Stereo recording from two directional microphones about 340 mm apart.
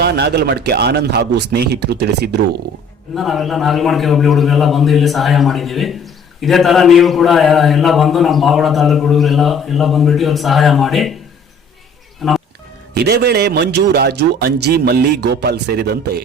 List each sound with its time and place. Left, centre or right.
0.0 s a man's voice: right
3.2 s a man's voice: centre
12.2 s a man's voice: centre
12.9 s a man's voice: right